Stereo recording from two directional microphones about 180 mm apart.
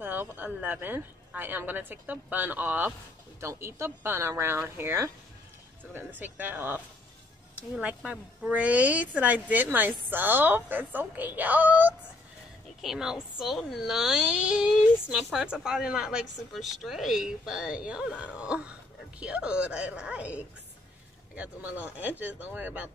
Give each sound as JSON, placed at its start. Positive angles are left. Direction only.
{"t": 0.0, "sound": "a woman's voice", "side_deg": -10}